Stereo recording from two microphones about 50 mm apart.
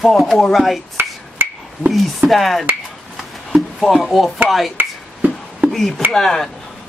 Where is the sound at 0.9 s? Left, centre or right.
Right.